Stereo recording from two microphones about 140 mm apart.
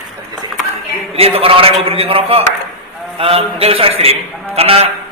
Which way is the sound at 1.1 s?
45° right (ahead or behind).